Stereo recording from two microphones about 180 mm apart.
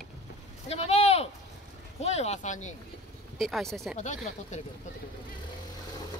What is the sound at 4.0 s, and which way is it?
Speech, 40° left (ahead or behind).